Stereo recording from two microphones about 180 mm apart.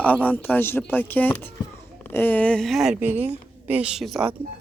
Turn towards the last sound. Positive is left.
turn(degrees=-5)  # may be behind; listen again after turning